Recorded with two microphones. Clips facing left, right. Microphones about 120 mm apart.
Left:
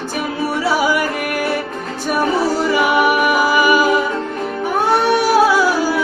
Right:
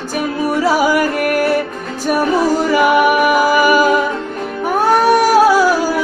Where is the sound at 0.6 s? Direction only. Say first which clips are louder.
Right 3 dB; 45° right (ahead or behind).